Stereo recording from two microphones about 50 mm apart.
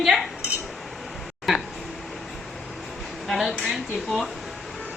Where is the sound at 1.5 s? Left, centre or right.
Centre.